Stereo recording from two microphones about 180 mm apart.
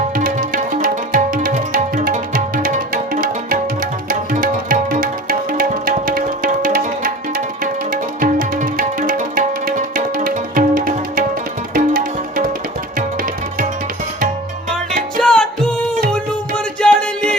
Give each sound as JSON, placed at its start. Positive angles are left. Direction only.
{"t": 0.2, "sound": "music", "side_deg": -50}
{"t": 15.2, "sound": "music", "side_deg": 5}
{"t": 16.8, "sound": "music", "side_deg": 5}